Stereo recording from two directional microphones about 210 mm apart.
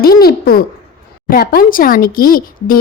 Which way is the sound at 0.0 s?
45° left (ahead or behind).